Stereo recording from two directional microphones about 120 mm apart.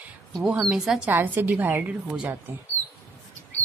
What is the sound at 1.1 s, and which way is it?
A woman's voice, 15° right (ahead or behind).